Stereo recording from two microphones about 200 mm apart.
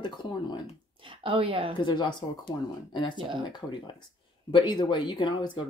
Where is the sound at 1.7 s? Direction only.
20° left (ahead or behind).